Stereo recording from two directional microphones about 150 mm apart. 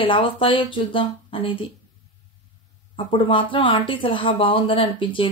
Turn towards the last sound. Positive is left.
turn(degrees=35)  # may be behind; listen again after turning